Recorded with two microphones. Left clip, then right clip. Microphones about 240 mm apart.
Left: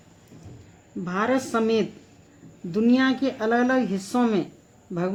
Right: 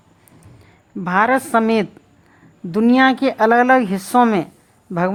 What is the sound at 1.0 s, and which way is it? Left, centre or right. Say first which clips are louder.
Speech: right 9 dB; right.